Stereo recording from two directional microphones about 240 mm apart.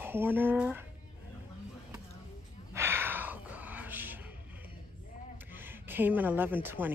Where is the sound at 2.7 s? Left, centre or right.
Centre.